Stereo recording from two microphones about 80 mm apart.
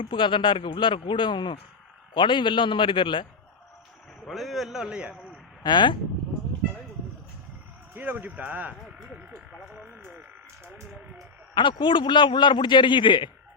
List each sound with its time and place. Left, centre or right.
0.1 s speech: left
2.1 s speech: left
4.3 s a man's voice: centre
5.6 s speech: left
7.9 s speech: right
9.3 s frog: centre
9.7 s frog: right
11.5 s a man's voice: left